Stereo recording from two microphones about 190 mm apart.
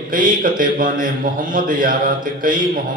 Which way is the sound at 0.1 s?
45° right (ahead or behind).